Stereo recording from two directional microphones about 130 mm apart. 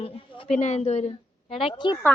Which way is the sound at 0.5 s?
60° left (ahead or behind).